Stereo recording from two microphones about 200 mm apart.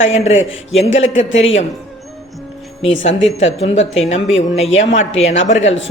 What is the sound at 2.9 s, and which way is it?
Speech, 70° left (ahead or behind).